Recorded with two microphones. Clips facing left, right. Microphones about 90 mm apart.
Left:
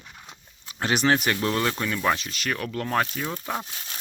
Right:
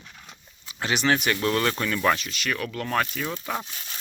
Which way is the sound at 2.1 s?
35° left (ahead or behind).